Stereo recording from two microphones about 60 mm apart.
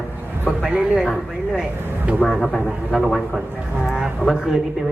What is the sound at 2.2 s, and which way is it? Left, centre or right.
Speech, left.